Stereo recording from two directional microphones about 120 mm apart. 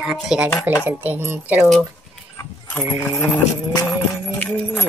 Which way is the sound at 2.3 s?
25° left (ahead or behind).